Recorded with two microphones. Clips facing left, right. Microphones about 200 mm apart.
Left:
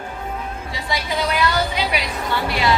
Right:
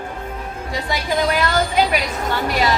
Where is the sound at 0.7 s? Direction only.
45° right (ahead or behind).